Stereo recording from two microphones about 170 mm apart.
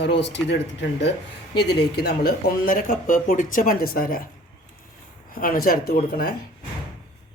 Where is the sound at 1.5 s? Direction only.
75° left (ahead or behind); by 4.2 s 55° left (ahead or behind).